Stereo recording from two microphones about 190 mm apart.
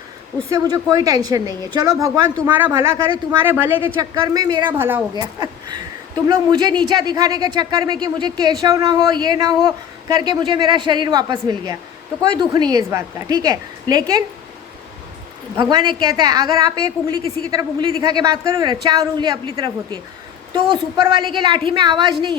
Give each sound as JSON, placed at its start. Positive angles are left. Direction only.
{"t": 0.4, "sound": "speech", "side_deg": -20}
{"t": 3.4, "sound": "speech", "side_deg": -10}
{"t": 4.8, "sound": "speech", "side_deg": -10}
{"t": 5.1, "sound": "speech", "side_deg": -20}
{"t": 15.7, "sound": "speech", "side_deg": -20}